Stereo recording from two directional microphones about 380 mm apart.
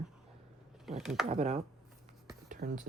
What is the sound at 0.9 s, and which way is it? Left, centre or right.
Speech, centre.